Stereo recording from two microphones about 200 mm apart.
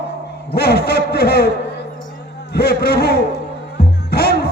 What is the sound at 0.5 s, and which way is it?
Speech, 50° left (ahead or behind).